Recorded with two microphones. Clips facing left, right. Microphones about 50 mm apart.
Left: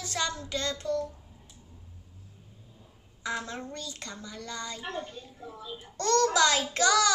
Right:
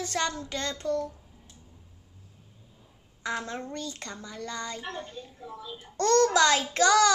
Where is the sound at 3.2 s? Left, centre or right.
Right.